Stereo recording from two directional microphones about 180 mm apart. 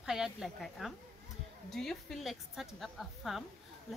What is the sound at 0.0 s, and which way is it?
A woman's voice, 5° right (ahead or behind).